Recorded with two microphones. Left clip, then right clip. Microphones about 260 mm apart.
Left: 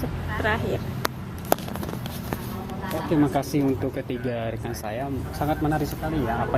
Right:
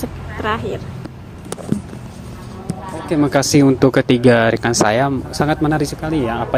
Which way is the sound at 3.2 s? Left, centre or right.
Right.